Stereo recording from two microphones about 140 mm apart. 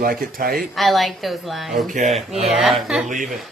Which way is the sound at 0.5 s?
Centre (ahead or behind).